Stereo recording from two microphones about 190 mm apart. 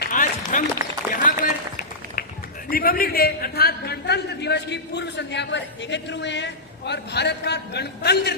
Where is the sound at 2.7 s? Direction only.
50° left (ahead or behind).